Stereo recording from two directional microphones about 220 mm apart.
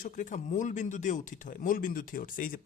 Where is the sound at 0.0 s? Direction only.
35° left (ahead or behind).